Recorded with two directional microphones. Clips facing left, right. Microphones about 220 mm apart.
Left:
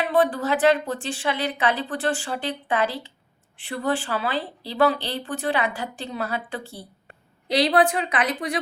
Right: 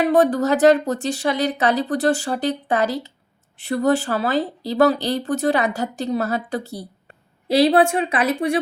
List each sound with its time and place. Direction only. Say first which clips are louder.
0.0 s speech: right 5 dB; 45° right (ahead or behind)
7.4 s a woman's voice: right 5 dB; 25° right (ahead or behind)